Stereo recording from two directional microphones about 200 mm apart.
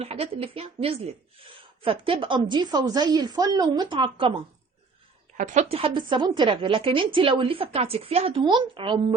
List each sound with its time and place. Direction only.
0.0 s a woman's voice: 30° right (ahead or behind)
5.4 s a woman's voice: 40° right (ahead or behind)